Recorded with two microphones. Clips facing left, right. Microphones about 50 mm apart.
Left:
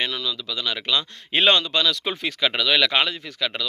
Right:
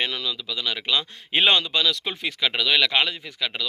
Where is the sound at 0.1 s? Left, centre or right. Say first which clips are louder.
Left 1 dB; right.